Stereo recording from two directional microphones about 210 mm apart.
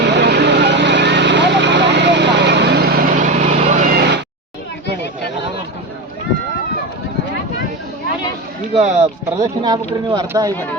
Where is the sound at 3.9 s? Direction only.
50° right (ahead or behind).